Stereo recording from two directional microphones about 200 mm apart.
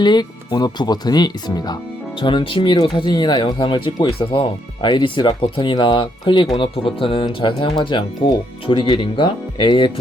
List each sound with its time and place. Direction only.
0.0 s speech: 20° left (ahead or behind)